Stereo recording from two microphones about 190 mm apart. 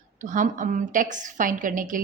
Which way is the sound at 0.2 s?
40° right (ahead or behind).